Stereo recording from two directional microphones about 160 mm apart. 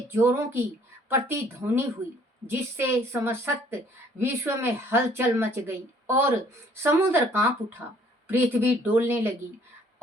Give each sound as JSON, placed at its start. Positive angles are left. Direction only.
{"t": 0.1, "sound": "speech", "side_deg": -15}